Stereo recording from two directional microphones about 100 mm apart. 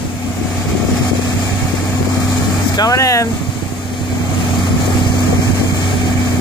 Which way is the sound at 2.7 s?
40° left (ahead or behind).